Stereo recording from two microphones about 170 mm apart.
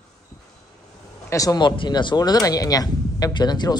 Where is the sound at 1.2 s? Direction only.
20° left (ahead or behind).